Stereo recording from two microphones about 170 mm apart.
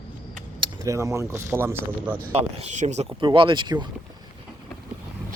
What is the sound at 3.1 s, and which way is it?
Speech, 30° right (ahead or behind).